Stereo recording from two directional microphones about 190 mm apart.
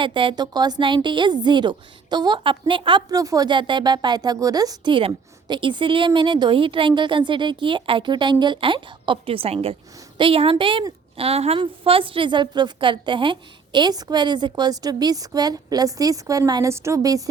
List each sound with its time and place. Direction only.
0.0 s a woman's voice: 25° right (ahead or behind)